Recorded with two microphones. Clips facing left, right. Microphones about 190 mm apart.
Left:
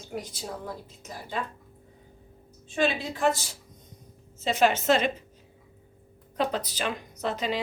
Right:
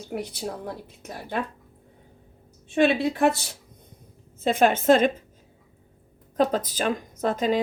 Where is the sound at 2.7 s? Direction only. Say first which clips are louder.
Right 6 dB; 60° right (ahead or behind).